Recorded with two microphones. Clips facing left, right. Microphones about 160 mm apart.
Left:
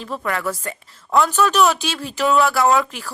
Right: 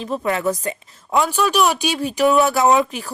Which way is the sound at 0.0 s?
20° right (ahead or behind).